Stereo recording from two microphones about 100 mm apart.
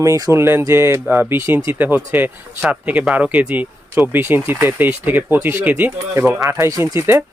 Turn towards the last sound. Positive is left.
turn(degrees=-25)  # may be behind; listen again after turning